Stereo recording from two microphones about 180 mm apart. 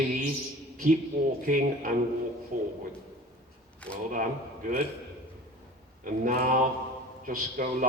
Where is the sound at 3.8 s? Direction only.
5° left (ahead or behind).